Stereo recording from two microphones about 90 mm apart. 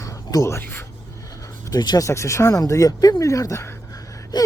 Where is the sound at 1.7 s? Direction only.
50° left (ahead or behind).